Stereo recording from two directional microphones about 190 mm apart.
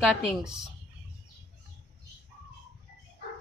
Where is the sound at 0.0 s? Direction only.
Centre (ahead or behind).